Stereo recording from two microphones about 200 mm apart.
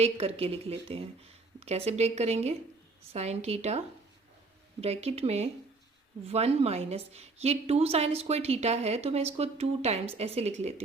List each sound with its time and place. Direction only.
0.0 s a woman's voice: 30° right (ahead or behind)